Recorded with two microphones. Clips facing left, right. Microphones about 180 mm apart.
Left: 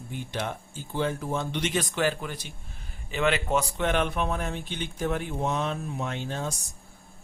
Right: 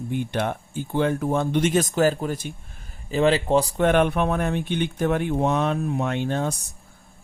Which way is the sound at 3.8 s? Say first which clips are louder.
Right 7 dB; 55° right (ahead or behind).